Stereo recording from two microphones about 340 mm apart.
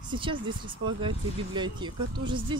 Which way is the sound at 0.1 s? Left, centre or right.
Centre.